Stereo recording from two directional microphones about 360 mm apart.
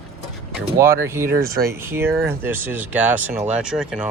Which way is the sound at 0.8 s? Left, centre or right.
Centre.